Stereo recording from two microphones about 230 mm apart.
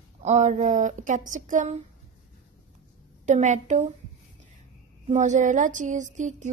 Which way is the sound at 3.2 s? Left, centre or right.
Right.